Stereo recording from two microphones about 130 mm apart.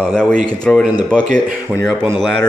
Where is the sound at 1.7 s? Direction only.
10° right (ahead or behind).